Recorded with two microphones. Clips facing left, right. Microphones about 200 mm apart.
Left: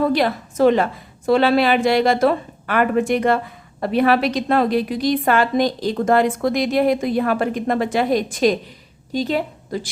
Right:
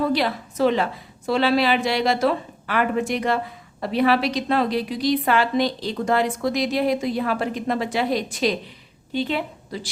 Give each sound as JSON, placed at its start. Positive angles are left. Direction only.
{"t": 0.1, "sound": "a woman's voice", "side_deg": 50}